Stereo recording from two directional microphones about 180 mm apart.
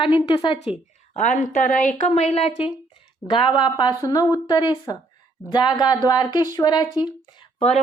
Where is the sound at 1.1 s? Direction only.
45° left (ahead or behind); by 7.5 s 25° left (ahead or behind).